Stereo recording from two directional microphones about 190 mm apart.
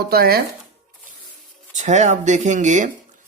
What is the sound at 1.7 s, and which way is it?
Speech, 40° right (ahead or behind).